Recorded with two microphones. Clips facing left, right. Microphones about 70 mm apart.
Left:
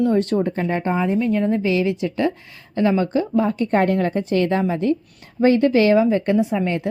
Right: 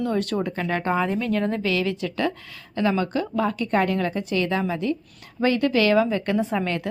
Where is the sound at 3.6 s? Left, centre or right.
Left.